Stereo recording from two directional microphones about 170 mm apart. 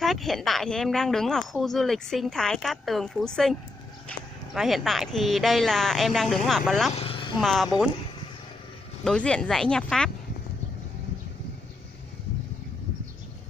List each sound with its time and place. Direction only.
0.0 s a woman's voice: centre (ahead or behind)
4.6 s a woman's voice: centre (ahead or behind)
6.9 s speech: 35° left (ahead or behind)
7.3 s a woman's voice: centre (ahead or behind)
9.0 s a woman's voice: 5° left (ahead or behind)